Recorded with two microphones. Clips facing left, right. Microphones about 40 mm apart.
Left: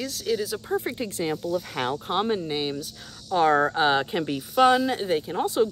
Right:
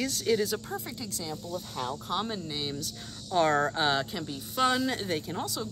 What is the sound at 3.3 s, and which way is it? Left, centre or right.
Speech, centre.